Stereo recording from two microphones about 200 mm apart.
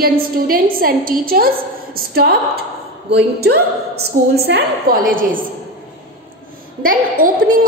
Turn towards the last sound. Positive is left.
turn(degrees=-45)  # may be behind; listen again after turning